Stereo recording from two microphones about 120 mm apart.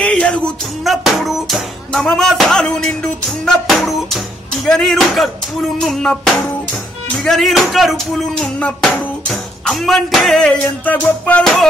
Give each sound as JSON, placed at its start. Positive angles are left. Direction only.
{"t": 0.0, "sound": "music", "side_deg": 10}
{"t": 0.8, "sound": "music", "side_deg": 0}